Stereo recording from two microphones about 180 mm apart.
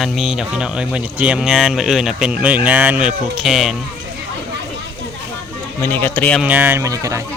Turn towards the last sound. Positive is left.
turn(degrees=-15)  # may be behind; listen again after turning